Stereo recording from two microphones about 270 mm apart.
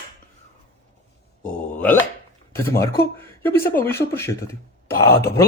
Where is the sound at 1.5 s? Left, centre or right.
Left.